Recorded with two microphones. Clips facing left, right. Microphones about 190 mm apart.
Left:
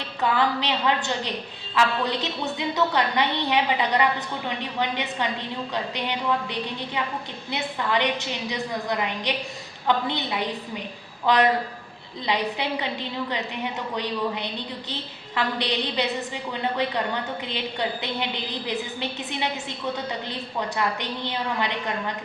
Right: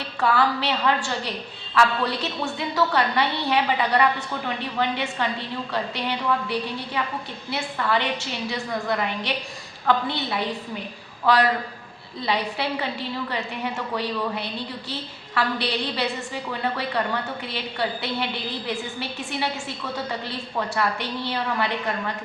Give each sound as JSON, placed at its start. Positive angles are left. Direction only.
{"t": 0.2, "sound": "a woman's voice", "side_deg": 20}
{"t": 11.3, "sound": "a woman's voice", "side_deg": 20}